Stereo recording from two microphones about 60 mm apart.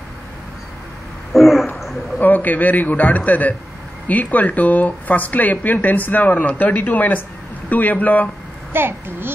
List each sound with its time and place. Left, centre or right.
1.3 s a sound: centre
2.1 s speech: left
8.7 s a child's voice: right